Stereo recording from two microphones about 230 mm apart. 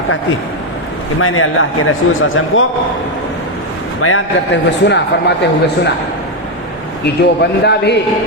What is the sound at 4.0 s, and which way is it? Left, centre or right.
A man's voice, left.